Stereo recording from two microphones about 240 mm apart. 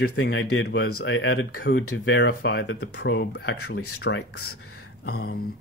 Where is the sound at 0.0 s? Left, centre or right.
Left.